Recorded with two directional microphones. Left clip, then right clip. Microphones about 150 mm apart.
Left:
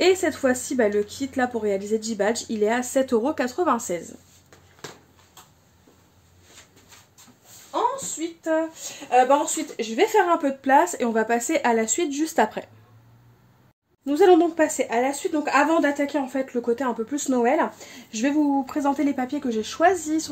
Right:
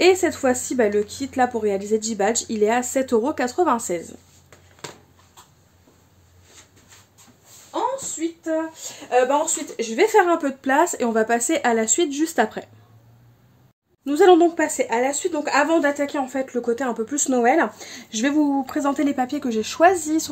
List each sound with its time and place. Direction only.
0.0 s speech: 20° right (ahead or behind)
8.5 s speech: centre (ahead or behind)
9.8 s speech: 30° right (ahead or behind)
14.0 s speech: 25° right (ahead or behind)